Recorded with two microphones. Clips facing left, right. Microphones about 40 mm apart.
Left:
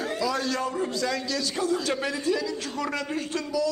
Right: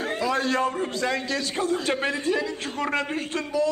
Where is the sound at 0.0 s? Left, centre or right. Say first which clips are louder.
Right 2 dB; right.